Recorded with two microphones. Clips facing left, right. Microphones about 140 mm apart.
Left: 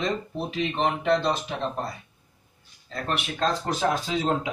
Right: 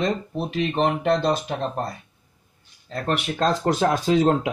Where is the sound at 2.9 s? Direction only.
50° right (ahead or behind).